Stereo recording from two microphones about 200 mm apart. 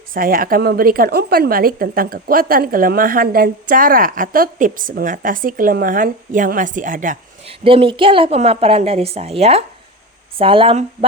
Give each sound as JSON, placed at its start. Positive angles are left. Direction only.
{"t": 0.1, "sound": "a woman's voice", "side_deg": -45}
{"t": 7.6, "sound": "a woman's voice", "side_deg": -25}